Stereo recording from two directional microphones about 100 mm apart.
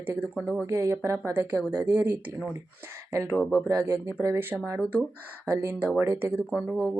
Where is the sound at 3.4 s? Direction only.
15° left (ahead or behind).